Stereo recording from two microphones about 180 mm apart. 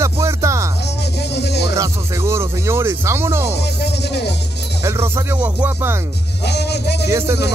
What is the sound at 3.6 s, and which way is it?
Music, 65° left (ahead or behind).